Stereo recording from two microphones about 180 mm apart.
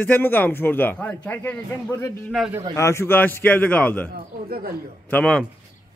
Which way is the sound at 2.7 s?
15° left (ahead or behind).